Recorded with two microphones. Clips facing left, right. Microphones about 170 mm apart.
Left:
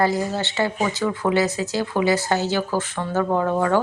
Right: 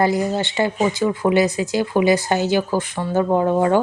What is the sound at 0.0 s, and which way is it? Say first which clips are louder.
Speech: right 3 dB; 15° right (ahead or behind).